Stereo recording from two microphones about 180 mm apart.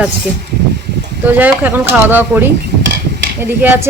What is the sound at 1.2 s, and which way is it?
Speech, 10° right (ahead or behind).